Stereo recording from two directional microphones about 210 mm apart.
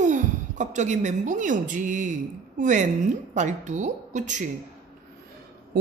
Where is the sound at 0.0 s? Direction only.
35° right (ahead or behind).